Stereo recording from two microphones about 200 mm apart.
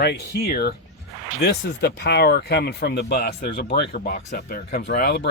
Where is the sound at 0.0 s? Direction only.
55° left (ahead or behind).